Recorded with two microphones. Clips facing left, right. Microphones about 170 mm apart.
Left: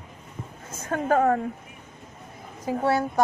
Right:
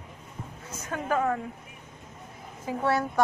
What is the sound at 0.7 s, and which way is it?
Speech, 50° left (ahead or behind).